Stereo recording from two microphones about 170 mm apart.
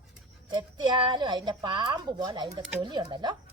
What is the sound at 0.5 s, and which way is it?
A woman's voice, 30° right (ahead or behind).